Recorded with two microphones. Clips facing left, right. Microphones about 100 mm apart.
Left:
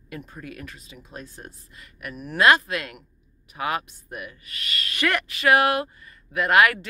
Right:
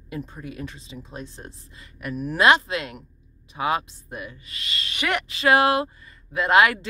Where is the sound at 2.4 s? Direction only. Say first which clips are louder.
Even; 25° right (ahead or behind).